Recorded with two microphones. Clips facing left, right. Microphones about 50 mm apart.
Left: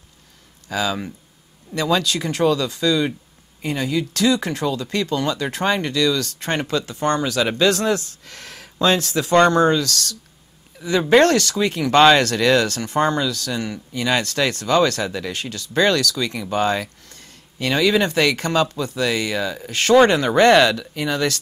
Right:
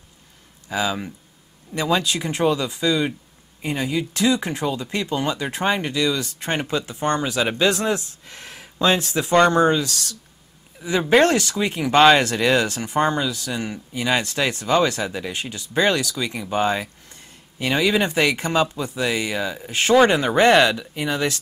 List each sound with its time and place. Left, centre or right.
0.7 s speech: right
20.7 s speech: right